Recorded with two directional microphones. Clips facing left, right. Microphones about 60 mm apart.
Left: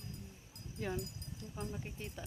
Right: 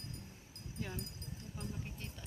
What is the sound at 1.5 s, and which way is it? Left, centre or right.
Speech, left.